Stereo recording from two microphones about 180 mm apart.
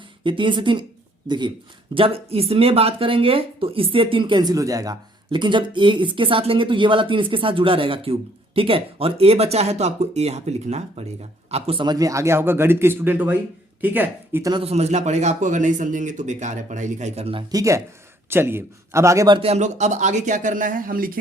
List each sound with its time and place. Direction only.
0.3 s a man's voice: 25° right (ahead or behind); by 14.5 s 10° right (ahead or behind)
14.5 s a man's voice: 35° right (ahead or behind)
17.5 s a man's voice: 15° right (ahead or behind)
19.4 s speech: 35° right (ahead or behind)